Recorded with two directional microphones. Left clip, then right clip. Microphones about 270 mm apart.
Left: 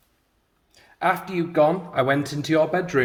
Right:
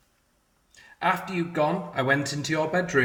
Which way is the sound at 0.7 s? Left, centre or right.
Left.